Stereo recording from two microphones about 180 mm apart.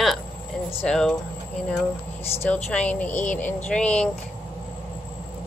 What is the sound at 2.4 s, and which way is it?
Speech, 5° left (ahead or behind).